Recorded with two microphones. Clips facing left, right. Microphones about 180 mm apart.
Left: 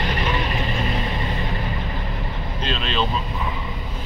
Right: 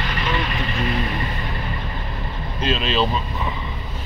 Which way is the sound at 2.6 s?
5° right (ahead or behind).